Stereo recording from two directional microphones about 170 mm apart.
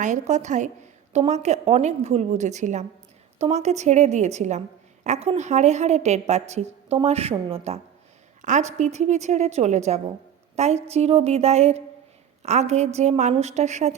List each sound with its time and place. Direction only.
0.0 s a woman's voice: 45° right (ahead or behind)